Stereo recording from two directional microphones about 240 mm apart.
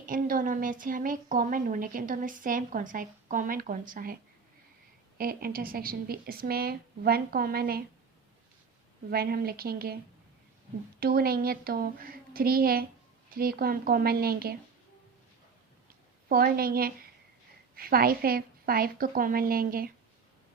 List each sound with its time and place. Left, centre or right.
0.0 s a woman's voice: right
9.0 s a woman's voice: right
11.0 s a woman's voice: right
16.3 s a woman's voice: right